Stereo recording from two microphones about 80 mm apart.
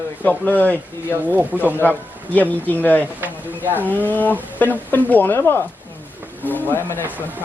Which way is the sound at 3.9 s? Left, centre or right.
Left.